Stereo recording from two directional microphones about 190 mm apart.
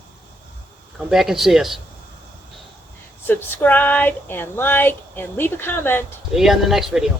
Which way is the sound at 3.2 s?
10° left (ahead or behind).